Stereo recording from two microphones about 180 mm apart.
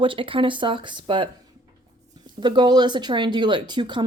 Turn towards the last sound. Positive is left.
turn(degrees=-25)  # may be behind; listen again after turning